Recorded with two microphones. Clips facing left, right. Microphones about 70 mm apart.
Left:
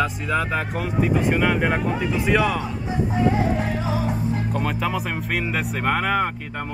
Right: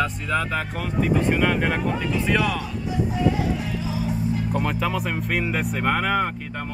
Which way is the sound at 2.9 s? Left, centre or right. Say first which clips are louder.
Left 1 dB; left.